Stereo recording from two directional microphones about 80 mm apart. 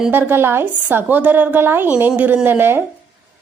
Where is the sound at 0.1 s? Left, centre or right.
Right.